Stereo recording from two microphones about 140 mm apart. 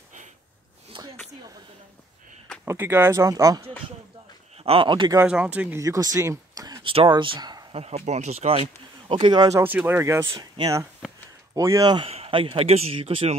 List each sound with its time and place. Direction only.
2.6 s speech: 15° right (ahead or behind)
4.6 s speech: 35° right (ahead or behind)
5.2 s speech: 10° right (ahead or behind)
5.8 s speech: 25° right (ahead or behind)
6.9 s speech: 40° right (ahead or behind)
7.7 s speech: 50° right (ahead or behind)
9.1 s speech: 35° right (ahead or behind)
9.6 s speech: 15° right (ahead or behind); by 12.1 s 30° right (ahead or behind)
12.1 s speech: 40° right (ahead or behind)